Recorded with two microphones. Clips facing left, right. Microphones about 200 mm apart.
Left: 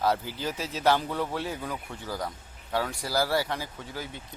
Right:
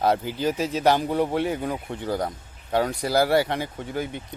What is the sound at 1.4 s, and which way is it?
Speech, 55° right (ahead or behind).